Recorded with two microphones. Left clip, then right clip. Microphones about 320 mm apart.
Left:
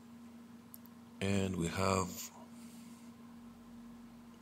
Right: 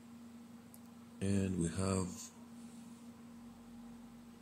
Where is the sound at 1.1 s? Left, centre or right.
Left.